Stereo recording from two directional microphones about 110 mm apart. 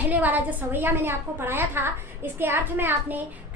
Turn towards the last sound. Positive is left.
turn(degrees=-15)  # may be behind; listen again after turning